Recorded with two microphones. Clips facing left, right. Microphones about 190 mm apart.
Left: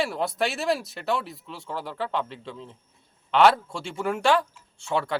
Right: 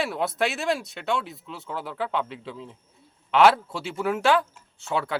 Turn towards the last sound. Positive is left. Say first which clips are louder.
# left 1 dB
turn(degrees=-5)  # may be behind; listen again after turning